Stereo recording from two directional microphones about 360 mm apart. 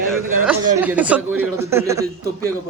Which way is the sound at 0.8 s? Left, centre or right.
Centre.